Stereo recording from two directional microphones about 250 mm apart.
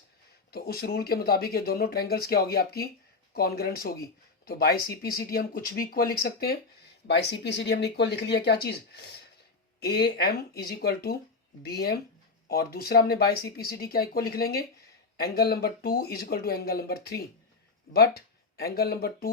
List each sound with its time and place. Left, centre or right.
0.5 s speech: left